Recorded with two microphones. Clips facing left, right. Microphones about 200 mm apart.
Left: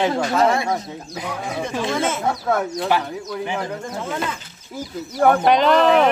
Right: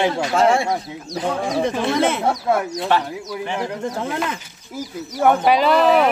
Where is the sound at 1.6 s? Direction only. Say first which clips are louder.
Right 3 dB; 60° right (ahead or behind).